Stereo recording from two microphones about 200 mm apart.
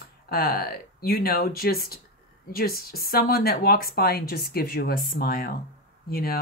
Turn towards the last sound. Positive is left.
turn(degrees=50)  # may be behind; listen again after turning